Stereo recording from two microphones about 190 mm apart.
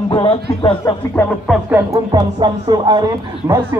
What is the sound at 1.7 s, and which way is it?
Speech, 20° right (ahead or behind).